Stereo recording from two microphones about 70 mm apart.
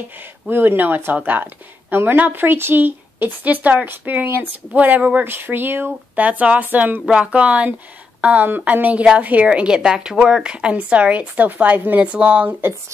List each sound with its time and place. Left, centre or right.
0.5 s speech: right